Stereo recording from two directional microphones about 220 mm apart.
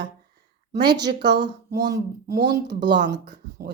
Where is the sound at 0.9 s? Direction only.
50° right (ahead or behind).